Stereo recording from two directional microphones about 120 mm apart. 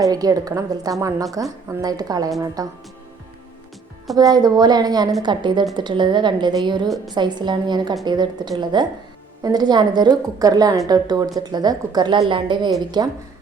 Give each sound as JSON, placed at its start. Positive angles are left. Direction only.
{"t": 0.0, "sound": "a woman's voice", "side_deg": -30}
{"t": 4.2, "sound": "a woman's voice", "side_deg": -30}
{"t": 6.8, "sound": "a woman's voice", "side_deg": 0}
{"t": 7.1, "sound": "a woman's voice", "side_deg": -35}